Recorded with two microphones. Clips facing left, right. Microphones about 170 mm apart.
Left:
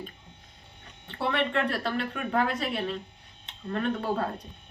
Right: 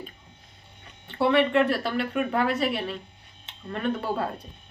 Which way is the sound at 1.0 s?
5° right (ahead or behind).